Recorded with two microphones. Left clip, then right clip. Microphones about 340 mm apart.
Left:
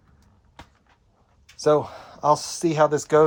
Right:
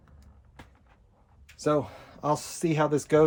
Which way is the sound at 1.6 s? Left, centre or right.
Centre.